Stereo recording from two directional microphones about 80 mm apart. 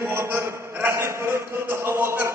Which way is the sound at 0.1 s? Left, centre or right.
Right.